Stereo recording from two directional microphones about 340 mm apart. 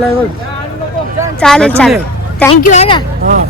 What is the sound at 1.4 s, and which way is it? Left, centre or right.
Speech, centre.